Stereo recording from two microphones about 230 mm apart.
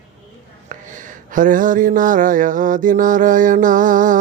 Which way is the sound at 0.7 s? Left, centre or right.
Right.